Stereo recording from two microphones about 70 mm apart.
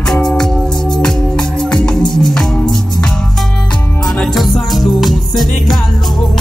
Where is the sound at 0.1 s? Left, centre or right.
Centre.